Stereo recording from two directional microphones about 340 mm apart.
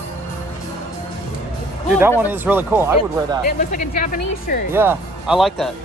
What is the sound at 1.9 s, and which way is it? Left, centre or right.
Speech, centre.